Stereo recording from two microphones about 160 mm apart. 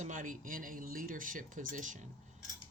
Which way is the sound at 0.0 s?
55° right (ahead or behind).